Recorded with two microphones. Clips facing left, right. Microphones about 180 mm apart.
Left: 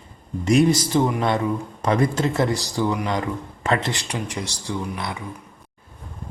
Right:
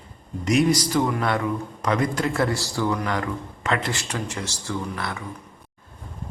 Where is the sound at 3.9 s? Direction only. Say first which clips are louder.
Left 1 dB; 15° left (ahead or behind).